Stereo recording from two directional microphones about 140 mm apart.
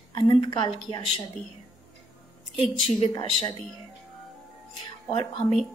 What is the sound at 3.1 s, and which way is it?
Speech, 35° left (ahead or behind).